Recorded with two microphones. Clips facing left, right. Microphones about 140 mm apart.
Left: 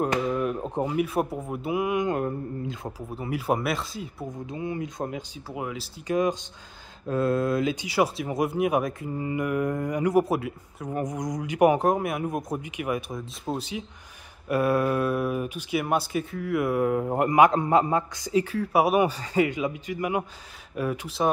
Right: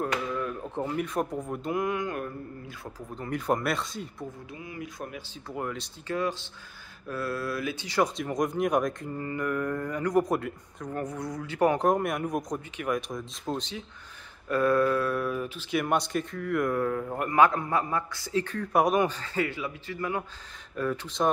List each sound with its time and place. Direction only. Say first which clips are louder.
0.3 s speech: left 5 dB; 20° left (ahead or behind)
3.0 s speech: even; 5° left (ahead or behind)
4.6 s speech: left 9 dB; 25° left (ahead or behind)
5.5 s speech: even; 5° left (ahead or behind)
6.1 s speech: left 6 dB; 15° left (ahead or behind)
17.0 s speech: left 3 dB; 25° left (ahead or behind); by 21.3 s 10° left (ahead or behind)